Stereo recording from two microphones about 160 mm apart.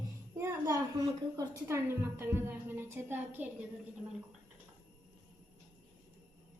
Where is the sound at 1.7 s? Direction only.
15° right (ahead or behind).